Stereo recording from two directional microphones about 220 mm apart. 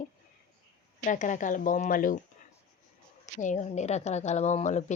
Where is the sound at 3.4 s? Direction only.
35° left (ahead or behind).